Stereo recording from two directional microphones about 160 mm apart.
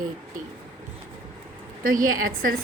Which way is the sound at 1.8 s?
60° right (ahead or behind).